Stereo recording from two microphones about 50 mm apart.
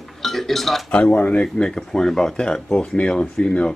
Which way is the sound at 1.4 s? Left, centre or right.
Centre.